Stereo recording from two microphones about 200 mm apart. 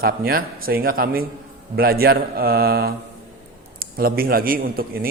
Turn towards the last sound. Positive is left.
turn(degrees=-45)  # may be behind; listen again after turning